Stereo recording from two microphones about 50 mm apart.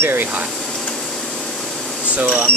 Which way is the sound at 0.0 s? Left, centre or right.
Right.